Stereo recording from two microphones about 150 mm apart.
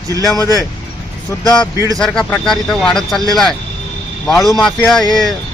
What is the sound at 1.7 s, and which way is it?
Speech, 20° right (ahead or behind).